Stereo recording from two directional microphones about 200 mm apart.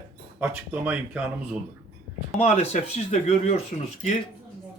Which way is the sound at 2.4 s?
30° left (ahead or behind).